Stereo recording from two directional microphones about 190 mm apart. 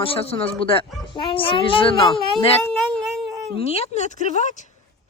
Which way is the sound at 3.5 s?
35° left (ahead or behind).